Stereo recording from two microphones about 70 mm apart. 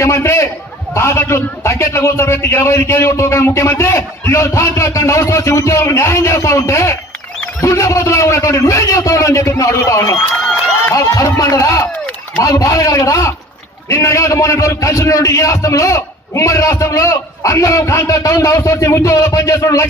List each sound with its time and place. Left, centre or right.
0.0 s a man's voice: left